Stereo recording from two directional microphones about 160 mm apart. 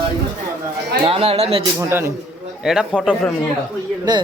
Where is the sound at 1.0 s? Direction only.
35° right (ahead or behind).